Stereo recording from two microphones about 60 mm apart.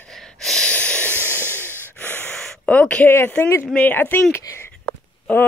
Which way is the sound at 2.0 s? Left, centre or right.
Left.